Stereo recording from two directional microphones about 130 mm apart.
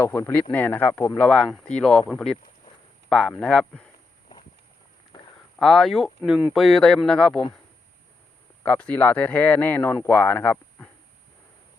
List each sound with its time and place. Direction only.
0.0 s speech: 20° left (ahead or behind)
1.2 s a man's voice: 5° left (ahead or behind)
5.5 s a man's voice: centre (ahead or behind)
8.6 s speech: 10° left (ahead or behind)